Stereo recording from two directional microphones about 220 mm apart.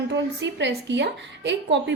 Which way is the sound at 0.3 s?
55° right (ahead or behind).